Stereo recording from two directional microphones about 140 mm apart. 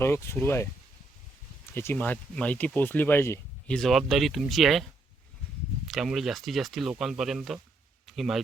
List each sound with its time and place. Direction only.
0.0 s speech: 20° left (ahead or behind)
1.7 s speech: 15° left (ahead or behind)
3.7 s speech: centre (ahead or behind)
5.9 s speech: centre (ahead or behind)
8.0 s a sound: centre (ahead or behind)